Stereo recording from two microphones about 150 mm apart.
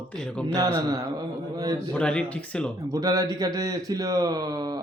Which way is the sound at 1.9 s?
5° left (ahead or behind).